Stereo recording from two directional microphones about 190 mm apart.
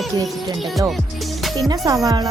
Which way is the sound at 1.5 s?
20° right (ahead or behind).